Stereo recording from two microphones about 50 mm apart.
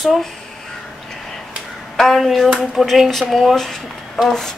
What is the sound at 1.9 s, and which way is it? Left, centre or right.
Speech, centre.